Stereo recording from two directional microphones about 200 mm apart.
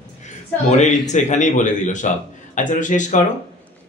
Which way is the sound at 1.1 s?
35° left (ahead or behind).